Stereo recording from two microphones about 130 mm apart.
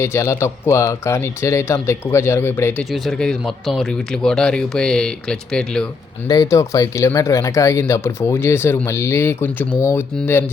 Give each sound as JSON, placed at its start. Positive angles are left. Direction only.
{"t": 0.0, "sound": "speech", "side_deg": 20}
{"t": 2.9, "sound": "speech", "side_deg": 0}
{"t": 6.2, "sound": "speech", "side_deg": 30}